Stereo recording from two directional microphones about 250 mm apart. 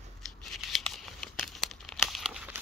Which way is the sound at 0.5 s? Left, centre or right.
Centre.